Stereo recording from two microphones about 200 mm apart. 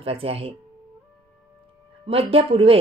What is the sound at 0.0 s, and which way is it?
Speech, 30° right (ahead or behind).